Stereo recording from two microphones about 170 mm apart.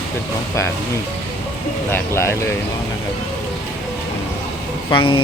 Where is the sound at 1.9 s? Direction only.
15° left (ahead or behind).